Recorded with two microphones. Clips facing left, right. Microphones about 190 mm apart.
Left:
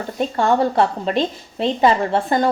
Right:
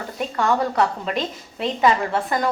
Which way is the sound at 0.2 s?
30° left (ahead or behind).